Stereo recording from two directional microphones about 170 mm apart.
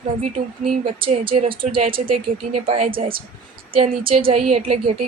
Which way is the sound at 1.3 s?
30° right (ahead or behind).